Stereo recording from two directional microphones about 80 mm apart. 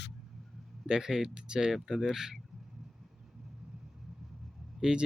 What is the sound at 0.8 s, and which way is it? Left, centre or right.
Speech, centre.